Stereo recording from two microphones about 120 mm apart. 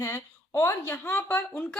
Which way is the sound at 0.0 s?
20° left (ahead or behind).